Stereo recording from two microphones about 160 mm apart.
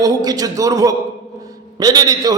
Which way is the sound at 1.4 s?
25° right (ahead or behind).